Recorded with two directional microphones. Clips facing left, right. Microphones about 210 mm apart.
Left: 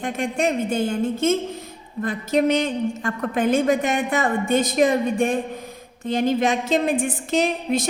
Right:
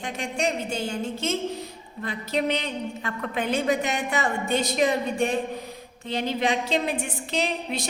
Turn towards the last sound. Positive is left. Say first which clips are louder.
# left 7 dB
turn(degrees=45)  # may be behind; listen again after turning